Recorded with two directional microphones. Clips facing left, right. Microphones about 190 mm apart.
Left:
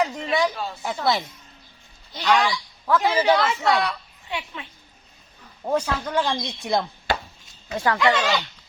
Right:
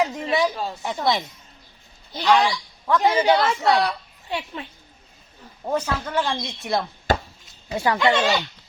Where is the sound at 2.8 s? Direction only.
5° left (ahead or behind).